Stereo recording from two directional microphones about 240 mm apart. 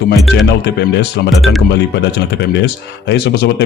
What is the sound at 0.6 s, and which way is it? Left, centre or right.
A man's voice, left.